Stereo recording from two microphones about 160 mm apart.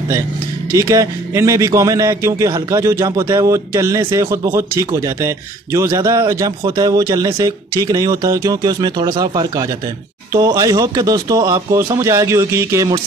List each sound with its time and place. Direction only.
0.7 s a man's voice: 20° right (ahead or behind)